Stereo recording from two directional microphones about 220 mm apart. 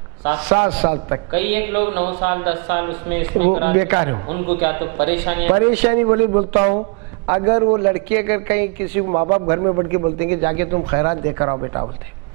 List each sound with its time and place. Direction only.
0.2 s a man's voice: 10° right (ahead or behind)
11.5 s speech: 25° right (ahead or behind)